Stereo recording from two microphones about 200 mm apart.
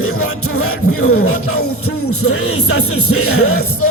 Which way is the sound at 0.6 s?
90° left.